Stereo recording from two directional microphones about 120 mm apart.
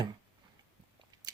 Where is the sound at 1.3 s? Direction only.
35° right (ahead or behind).